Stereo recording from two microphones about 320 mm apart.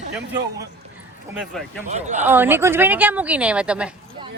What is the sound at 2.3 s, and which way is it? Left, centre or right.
A woman's voice, centre.